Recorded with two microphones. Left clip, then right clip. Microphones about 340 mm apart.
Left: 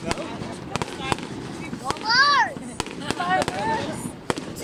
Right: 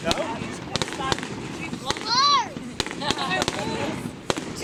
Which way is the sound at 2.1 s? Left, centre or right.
Left.